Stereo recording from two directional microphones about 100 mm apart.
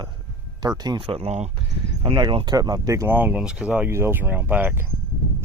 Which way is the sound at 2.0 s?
50° right (ahead or behind).